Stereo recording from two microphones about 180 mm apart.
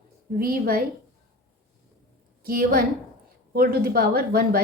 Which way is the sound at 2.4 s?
55° right (ahead or behind).